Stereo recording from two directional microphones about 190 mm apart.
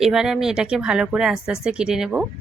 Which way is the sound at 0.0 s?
Centre (ahead or behind).